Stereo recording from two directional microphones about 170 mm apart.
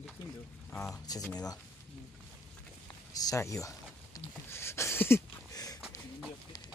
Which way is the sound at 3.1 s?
20° left (ahead or behind).